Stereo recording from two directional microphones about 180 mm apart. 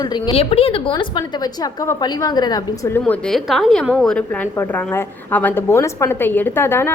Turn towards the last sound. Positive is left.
turn(degrees=10)  # may be behind; listen again after turning